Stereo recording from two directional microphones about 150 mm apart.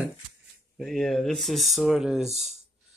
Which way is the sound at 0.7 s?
Centre (ahead or behind).